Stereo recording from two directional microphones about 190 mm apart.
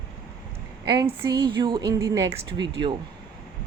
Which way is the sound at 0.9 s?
25° right (ahead or behind).